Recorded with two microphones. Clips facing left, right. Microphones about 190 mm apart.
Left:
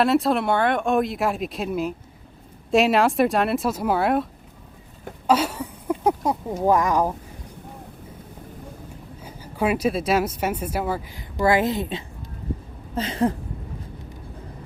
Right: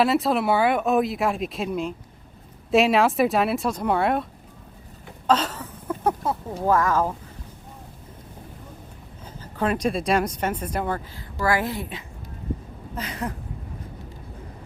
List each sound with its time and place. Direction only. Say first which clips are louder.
0.0 s speech: left 1 dB; centre (ahead or behind); by 7.1 s 15° left (ahead or behind)
9.2 s speech: left 2 dB; 10° left (ahead or behind)
11.3 s a woman's voice: left 4 dB; 20° left (ahead or behind)